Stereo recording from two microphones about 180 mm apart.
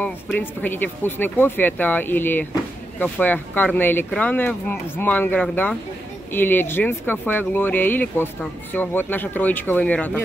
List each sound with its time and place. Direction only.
0.0 s speech: 10° left (ahead or behind)